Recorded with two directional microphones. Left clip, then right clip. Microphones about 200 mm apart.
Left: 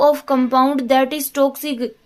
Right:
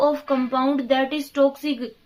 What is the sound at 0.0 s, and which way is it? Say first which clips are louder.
A woman's voice: left 6 dB; 45° left (ahead or behind).